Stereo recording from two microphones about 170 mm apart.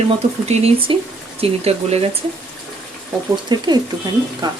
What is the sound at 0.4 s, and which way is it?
Speech, 40° right (ahead or behind).